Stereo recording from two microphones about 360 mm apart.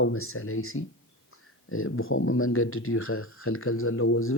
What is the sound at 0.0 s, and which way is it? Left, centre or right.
Speech, left.